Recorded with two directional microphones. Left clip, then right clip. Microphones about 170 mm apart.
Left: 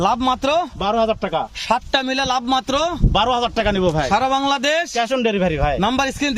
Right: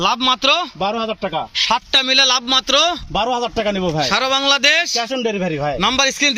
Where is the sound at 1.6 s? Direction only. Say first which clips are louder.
Right 5 dB; 55° left (ahead or behind).